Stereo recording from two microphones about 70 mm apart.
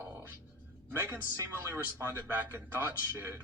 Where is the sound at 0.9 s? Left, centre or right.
Right.